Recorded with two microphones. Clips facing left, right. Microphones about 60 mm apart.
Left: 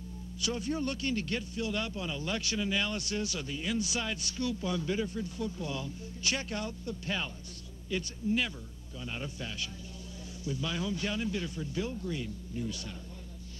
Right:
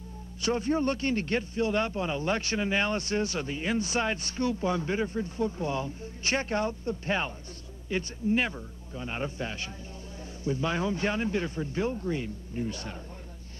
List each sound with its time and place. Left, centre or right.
0.4 s speech: right